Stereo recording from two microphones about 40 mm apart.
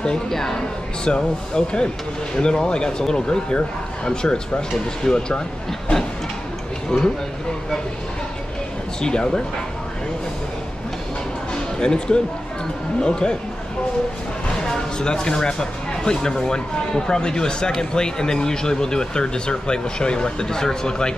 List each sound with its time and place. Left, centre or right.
0.3 s speech: centre
1.0 s speech: left
6.9 s speech: left
9.0 s speech: centre
11.5 s music: left
13.0 s speech: centre
14.6 s speech: centre